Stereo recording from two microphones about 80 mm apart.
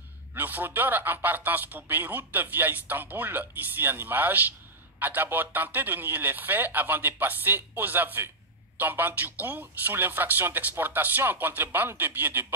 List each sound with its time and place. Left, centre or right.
0.3 s speech: right